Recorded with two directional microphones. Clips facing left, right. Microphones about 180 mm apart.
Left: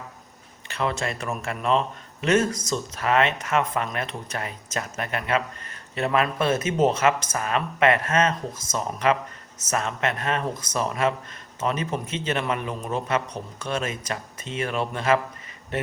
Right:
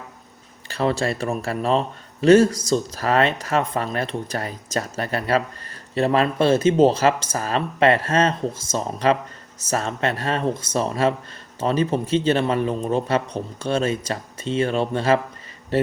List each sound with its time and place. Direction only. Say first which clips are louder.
0.7 s a man's voice: right 5 dB; 35° right (ahead or behind)